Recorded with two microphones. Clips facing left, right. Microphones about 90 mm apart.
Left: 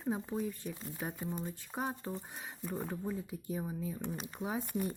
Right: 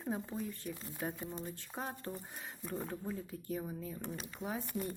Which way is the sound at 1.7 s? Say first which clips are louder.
Left 5 dB; 20° left (ahead or behind).